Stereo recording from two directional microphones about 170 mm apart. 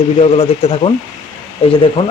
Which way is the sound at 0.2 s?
35° left (ahead or behind).